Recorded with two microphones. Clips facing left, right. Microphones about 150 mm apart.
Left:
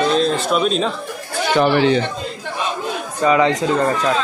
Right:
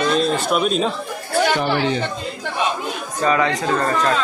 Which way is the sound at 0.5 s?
5° right (ahead or behind).